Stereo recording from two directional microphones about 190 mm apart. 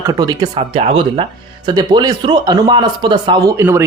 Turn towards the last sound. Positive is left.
turn(degrees=-15)  # may be behind; listen again after turning